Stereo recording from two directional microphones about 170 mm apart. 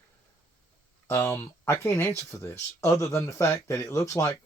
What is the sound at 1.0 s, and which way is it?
Speech, 15° left (ahead or behind).